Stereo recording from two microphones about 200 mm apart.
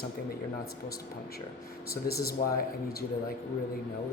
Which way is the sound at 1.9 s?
50° left (ahead or behind).